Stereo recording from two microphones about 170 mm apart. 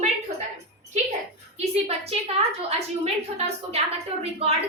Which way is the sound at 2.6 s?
35° right (ahead or behind).